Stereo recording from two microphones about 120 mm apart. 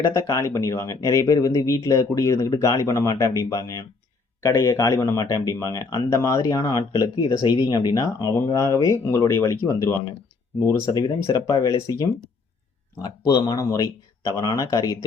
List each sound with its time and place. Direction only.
0.1 s speech: 25° left (ahead or behind)
10.8 s speech: 30° left (ahead or behind)